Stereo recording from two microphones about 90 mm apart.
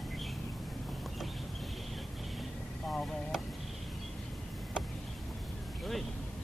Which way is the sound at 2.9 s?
Centre (ahead or behind).